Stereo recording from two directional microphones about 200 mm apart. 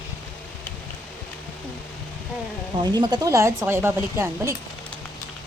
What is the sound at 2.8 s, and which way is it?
Speech, 20° right (ahead or behind).